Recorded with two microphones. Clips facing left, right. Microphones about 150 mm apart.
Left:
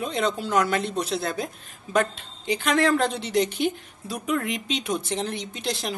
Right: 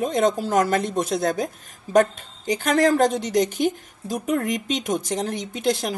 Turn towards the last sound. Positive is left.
turn(degrees=-50)  # may be behind; listen again after turning